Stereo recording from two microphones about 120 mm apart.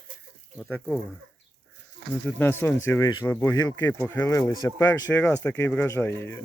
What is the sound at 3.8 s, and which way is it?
Speech, 15° left (ahead or behind).